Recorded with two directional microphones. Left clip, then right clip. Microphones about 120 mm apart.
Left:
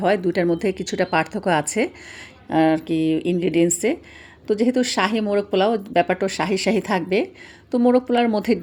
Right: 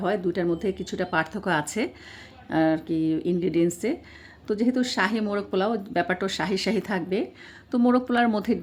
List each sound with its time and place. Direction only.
0.0 s speech: 45° left (ahead or behind)
7.7 s a woman's voice: 15° left (ahead or behind)